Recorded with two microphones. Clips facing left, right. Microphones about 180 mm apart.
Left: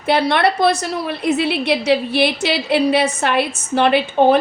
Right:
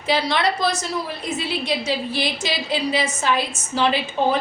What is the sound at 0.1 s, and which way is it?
A woman's voice, 60° left (ahead or behind).